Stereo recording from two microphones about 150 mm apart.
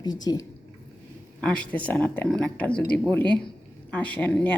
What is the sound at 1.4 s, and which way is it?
A woman's voice, 5° left (ahead or behind).